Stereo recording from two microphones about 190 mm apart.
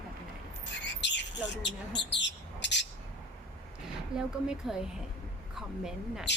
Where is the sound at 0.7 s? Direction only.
65° left (ahead or behind).